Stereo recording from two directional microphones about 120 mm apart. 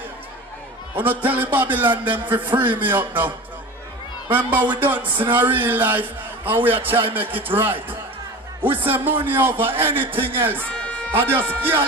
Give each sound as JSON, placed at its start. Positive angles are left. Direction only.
{"t": 0.9, "sound": "a man's voice", "side_deg": -15}
{"t": 4.3, "sound": "a man's voice", "side_deg": -15}